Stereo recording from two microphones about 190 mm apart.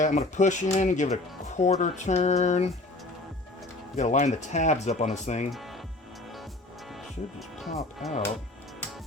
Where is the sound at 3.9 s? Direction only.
40° left (ahead or behind).